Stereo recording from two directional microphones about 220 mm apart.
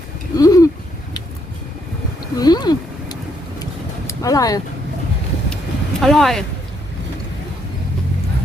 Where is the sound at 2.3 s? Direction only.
20° left (ahead or behind).